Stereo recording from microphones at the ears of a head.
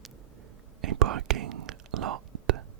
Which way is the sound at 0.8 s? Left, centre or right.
Right.